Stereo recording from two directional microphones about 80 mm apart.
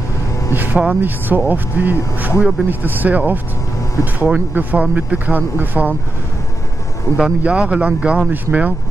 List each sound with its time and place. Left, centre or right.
0.6 s speech: right
7.2 s a man's voice: centre